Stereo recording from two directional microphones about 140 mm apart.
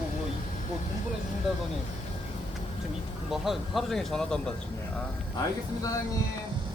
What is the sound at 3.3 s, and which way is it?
Speech, centre (ahead or behind).